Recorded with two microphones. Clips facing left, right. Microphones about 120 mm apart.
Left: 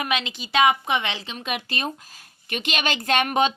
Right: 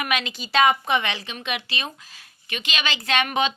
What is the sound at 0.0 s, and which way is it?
A woman's voice, 25° left (ahead or behind).